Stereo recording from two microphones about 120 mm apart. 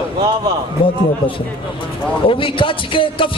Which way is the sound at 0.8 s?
45° left (ahead or behind).